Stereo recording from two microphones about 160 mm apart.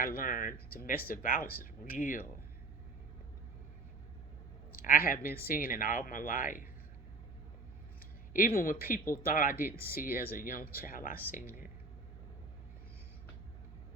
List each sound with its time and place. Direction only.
0.0 s speech: 60° left (ahead or behind)
4.7 s speech: 65° left (ahead or behind)
8.3 s speech: 60° left (ahead or behind)